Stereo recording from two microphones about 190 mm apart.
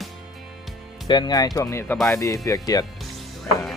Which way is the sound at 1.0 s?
25° left (ahead or behind).